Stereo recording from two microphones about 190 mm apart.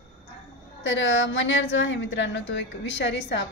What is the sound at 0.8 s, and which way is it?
A woman's voice, 75° left (ahead or behind).